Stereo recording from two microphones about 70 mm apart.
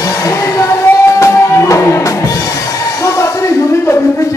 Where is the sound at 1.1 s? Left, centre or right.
Left.